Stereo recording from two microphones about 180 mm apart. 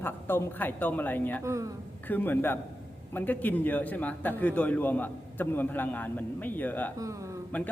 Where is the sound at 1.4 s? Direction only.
15° right (ahead or behind).